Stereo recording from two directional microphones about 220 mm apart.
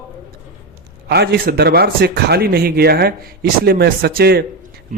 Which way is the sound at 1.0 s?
50° right (ahead or behind).